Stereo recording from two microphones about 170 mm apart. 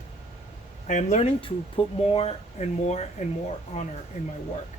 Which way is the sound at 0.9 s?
45° left (ahead or behind).